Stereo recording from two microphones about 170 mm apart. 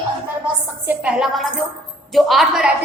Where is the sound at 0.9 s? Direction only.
5° right (ahead or behind).